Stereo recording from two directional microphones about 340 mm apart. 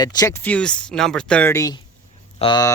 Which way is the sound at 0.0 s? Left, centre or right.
Centre.